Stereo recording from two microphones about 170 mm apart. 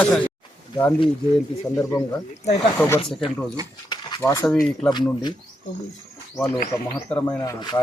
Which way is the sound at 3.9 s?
20° left (ahead or behind).